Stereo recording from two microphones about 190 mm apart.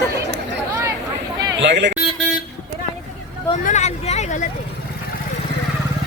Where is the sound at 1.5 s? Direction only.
65° right (ahead or behind).